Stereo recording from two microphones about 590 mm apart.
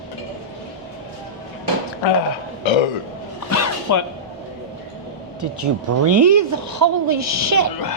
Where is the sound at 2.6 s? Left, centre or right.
Left.